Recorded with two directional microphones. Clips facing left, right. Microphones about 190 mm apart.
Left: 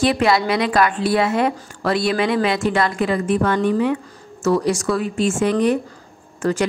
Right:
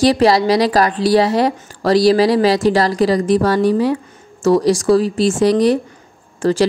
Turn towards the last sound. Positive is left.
turn(degrees=-30)  # may be behind; listen again after turning